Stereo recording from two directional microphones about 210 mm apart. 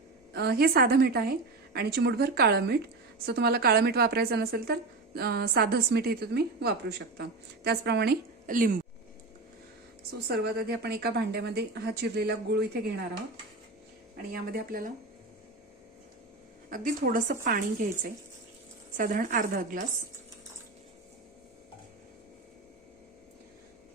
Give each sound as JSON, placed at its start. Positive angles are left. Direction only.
{"t": 0.3, "sound": "a woman's voice", "side_deg": -50}
{"t": 10.1, "sound": "a woman's voice", "side_deg": -50}
{"t": 14.3, "sound": "a woman's voice", "side_deg": -45}
{"t": 16.6, "sound": "a woman's voice", "side_deg": -40}